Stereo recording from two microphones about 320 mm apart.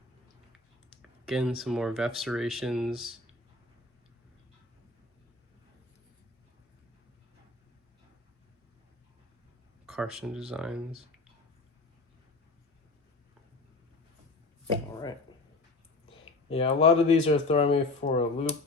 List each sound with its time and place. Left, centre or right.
1.3 s speech: centre
9.8 s speech: centre
16.0 s speech: centre